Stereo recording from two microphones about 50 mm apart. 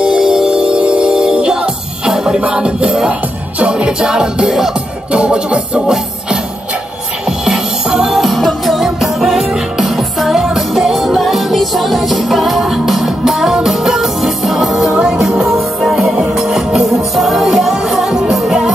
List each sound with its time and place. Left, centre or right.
0.0 s music: centre
5.1 s music: centre
7.2 s music: centre